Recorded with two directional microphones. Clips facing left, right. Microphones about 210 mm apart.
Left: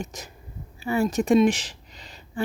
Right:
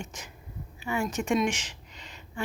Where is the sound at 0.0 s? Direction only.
40° left (ahead or behind).